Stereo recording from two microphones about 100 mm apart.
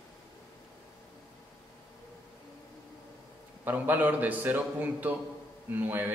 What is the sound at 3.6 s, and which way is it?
A man's voice, 20° right (ahead or behind).